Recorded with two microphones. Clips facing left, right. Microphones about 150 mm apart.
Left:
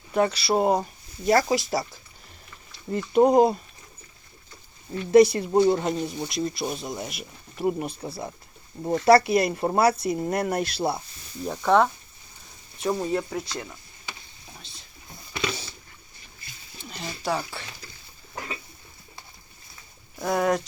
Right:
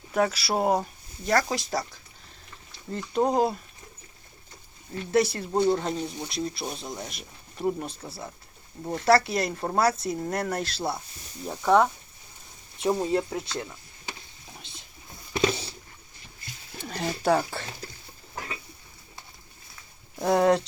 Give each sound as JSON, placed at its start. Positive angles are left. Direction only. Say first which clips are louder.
{"t": 0.1, "sound": "speech", "louder": "left 3 dB", "side_deg": -5}
{"t": 1.2, "sound": "speech", "louder": "left 4 dB", "side_deg": 10}
{"t": 2.9, "sound": "speech", "louder": "left 6 dB", "side_deg": 15}
{"t": 5.1, "sound": "speech", "louder": "left 7 dB", "side_deg": 15}
{"t": 11.4, "sound": "speech", "louder": "left 1 dB", "side_deg": -5}
{"t": 12.8, "sound": "speech", "louder": "right 1 dB", "side_deg": -25}
{"t": 15.3, "sound": "a sound", "louder": "right 5 dB", "side_deg": -30}
{"t": 16.7, "sound": "a sound", "louder": "right 6 dB", "side_deg": -50}
{"t": 20.1, "sound": "speech", "louder": "right 3 dB", "side_deg": -25}